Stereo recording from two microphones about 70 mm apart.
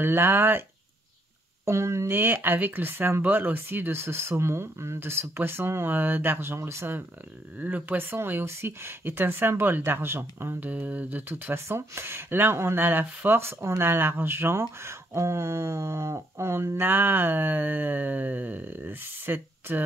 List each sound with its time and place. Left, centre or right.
0.0 s speech: right
1.7 s speech: right
7.5 s speech: right
13.4 s speech: right